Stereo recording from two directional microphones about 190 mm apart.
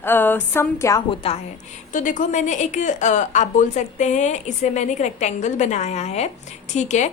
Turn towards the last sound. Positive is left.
turn(degrees=40)  # may be behind; listen again after turning